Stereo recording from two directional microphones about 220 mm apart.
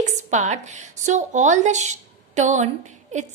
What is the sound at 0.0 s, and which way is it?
A woman's voice, 35° right (ahead or behind).